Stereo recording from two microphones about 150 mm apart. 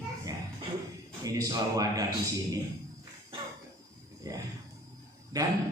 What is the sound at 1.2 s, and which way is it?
Speech, 25° right (ahead or behind).